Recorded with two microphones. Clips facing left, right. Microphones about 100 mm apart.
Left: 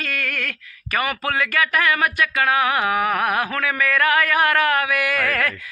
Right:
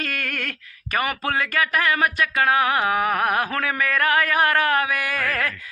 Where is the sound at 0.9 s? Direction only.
30° right (ahead or behind).